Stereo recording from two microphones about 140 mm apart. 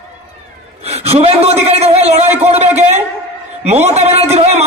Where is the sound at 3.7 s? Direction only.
50° right (ahead or behind).